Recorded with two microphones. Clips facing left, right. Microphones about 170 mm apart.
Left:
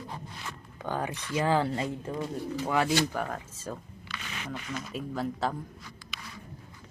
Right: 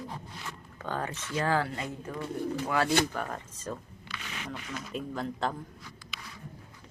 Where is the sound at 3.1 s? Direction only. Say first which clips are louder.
Left 2 dB; 5° left (ahead or behind).